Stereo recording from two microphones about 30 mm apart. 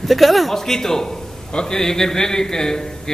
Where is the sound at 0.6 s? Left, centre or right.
Centre.